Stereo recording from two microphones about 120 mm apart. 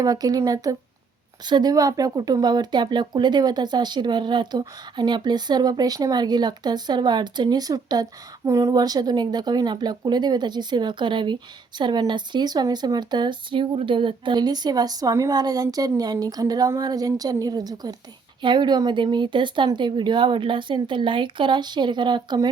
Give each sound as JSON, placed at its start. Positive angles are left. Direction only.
{"t": 0.0, "sound": "speech", "side_deg": -30}